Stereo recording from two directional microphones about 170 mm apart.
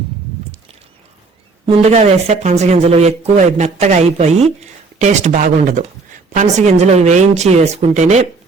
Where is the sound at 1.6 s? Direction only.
40° right (ahead or behind).